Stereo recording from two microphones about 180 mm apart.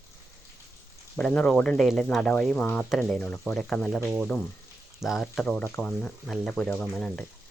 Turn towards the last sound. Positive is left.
turn(degrees=5)  # may be behind; listen again after turning